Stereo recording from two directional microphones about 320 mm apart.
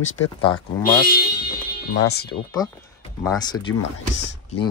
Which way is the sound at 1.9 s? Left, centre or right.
Left.